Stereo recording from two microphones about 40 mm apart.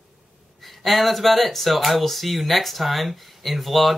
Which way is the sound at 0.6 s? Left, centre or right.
Centre.